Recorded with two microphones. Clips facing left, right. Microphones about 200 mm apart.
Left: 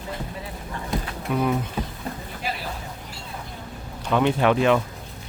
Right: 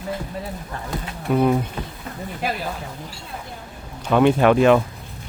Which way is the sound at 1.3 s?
40° right (ahead or behind).